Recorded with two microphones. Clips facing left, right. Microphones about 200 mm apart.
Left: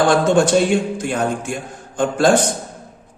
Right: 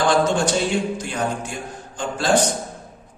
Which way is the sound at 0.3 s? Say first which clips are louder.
Left 6 dB; 55° left (ahead or behind).